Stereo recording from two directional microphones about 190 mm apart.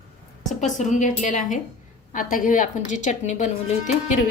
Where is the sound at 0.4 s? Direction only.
40° left (ahead or behind).